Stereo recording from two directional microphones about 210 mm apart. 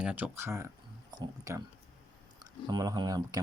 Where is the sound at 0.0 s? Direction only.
5° right (ahead or behind).